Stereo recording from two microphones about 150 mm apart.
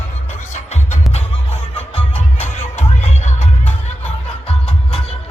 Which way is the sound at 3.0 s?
50° left (ahead or behind).